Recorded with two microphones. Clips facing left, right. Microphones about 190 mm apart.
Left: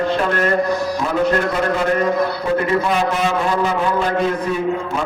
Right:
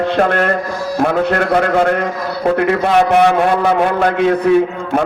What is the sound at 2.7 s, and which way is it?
A man's voice, 65° right (ahead or behind).